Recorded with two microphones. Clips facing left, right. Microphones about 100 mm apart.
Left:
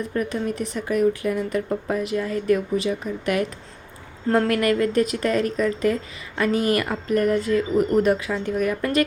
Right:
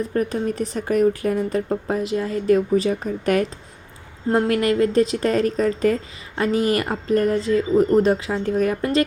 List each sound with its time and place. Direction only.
0.0 s a woman's voice: 40° right (ahead or behind)
4.3 s speech: 25° right (ahead or behind)